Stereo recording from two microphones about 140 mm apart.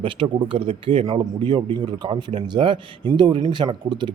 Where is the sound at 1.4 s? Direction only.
35° right (ahead or behind).